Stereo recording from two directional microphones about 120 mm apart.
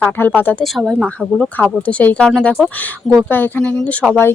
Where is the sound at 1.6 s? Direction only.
10° left (ahead or behind).